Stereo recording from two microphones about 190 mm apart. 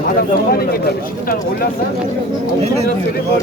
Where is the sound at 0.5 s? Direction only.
50° left (ahead or behind).